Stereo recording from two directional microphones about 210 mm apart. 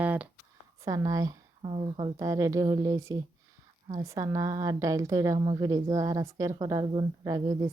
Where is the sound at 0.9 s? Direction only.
15° right (ahead or behind).